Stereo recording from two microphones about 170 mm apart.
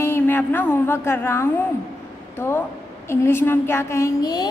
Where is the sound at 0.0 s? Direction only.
15° left (ahead or behind).